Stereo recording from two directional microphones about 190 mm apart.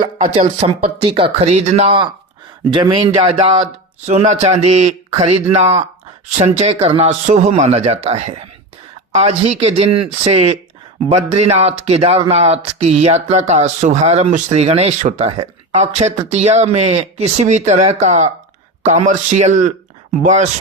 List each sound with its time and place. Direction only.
0.3 s speech: 35° right (ahead or behind)